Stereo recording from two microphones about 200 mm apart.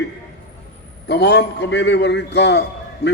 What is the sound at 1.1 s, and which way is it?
A man's voice, 55° left (ahead or behind).